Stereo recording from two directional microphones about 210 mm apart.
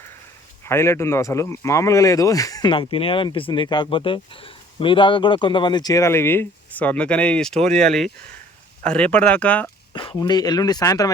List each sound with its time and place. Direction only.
0.6 s speech: 10° left (ahead or behind)
8.8 s speech: 5° left (ahead or behind)
9.9 s speech: 25° left (ahead or behind)